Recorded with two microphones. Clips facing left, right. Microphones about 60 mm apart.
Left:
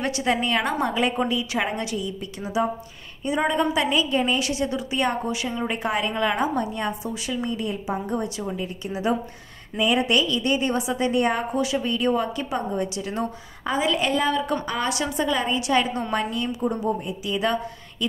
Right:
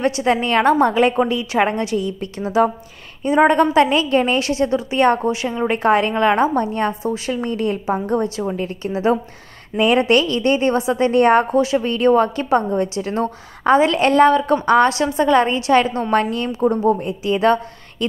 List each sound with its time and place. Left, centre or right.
0.0 s a woman's voice: right
0.4 s a woman's voice: right
3.3 s a woman's voice: right
5.3 s a woman's voice: right
5.8 s a woman's voice: right
7.8 s a woman's voice: right
11.6 s a woman's voice: right
11.9 s a woman's voice: right
13.7 s a woman's voice: right